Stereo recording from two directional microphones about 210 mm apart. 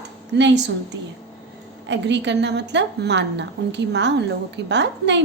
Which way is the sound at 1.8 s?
60° right (ahead or behind).